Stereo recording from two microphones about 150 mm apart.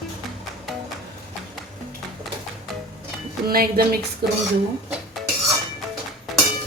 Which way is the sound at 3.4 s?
85° right.